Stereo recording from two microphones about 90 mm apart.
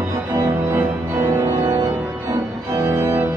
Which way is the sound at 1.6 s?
45° right (ahead or behind).